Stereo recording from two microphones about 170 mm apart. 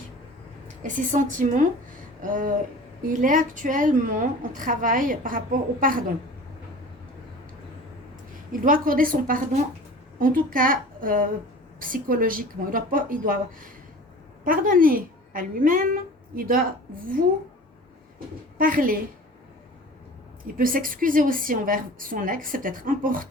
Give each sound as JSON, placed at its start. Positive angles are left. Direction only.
{"t": 0.8, "sound": "a woman's voice", "side_deg": -50}
{"t": 8.6, "sound": "a woman's voice", "side_deg": -55}
{"t": 18.5, "sound": "a woman's voice", "side_deg": -55}
{"t": 20.4, "sound": "a woman's voice", "side_deg": -55}